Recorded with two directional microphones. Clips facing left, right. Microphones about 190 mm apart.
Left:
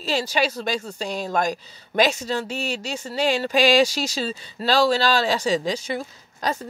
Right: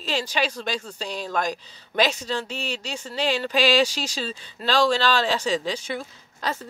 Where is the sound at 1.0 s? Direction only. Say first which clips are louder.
Left 3 dB; 45° left (ahead or behind).